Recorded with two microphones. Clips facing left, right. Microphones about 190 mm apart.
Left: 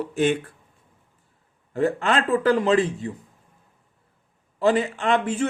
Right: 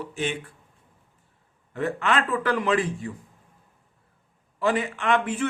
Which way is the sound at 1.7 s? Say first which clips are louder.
Left 3 dB; 30° left (ahead or behind).